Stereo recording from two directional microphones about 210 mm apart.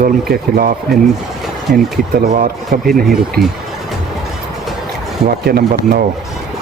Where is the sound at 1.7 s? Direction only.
45° right (ahead or behind).